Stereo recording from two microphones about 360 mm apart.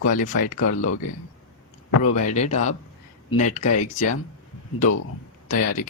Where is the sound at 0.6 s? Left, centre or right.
Left.